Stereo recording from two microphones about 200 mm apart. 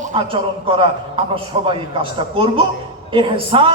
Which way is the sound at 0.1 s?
25° right (ahead or behind).